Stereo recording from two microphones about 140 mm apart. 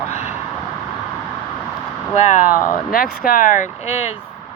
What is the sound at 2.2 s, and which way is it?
Speech, 60° left (ahead or behind).